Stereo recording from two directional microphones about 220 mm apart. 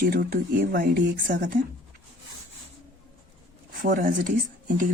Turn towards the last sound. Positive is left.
turn(degrees=-40)  # may be behind; listen again after turning